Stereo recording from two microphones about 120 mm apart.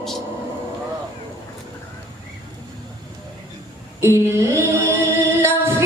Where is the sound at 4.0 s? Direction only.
20° right (ahead or behind).